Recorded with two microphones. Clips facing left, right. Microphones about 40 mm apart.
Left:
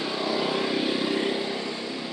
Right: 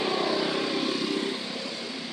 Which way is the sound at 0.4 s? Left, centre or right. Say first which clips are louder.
Left 2 dB; centre.